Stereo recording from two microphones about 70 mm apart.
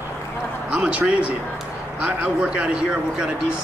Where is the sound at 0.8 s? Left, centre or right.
Centre.